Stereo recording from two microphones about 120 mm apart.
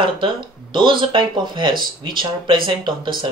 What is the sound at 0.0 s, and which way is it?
Speech, 45° right (ahead or behind).